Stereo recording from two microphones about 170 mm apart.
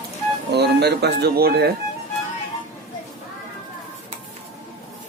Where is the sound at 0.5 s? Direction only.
75° right (ahead or behind).